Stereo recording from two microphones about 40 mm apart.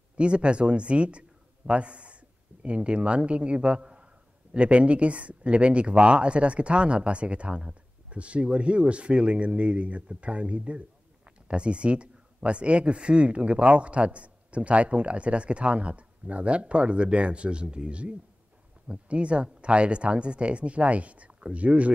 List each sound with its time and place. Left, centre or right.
0.2 s speech: right